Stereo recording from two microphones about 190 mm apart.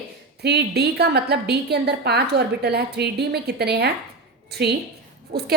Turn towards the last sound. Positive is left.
turn(degrees=-55)  # may be behind; listen again after turning